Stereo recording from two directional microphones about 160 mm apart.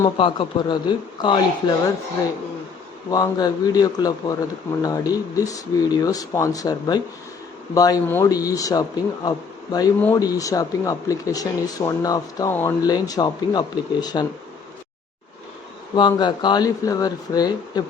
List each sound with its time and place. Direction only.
0.2 s speech: 30° left (ahead or behind)
3.1 s speech: 25° left (ahead or behind)
16.0 s speech: 30° left (ahead or behind)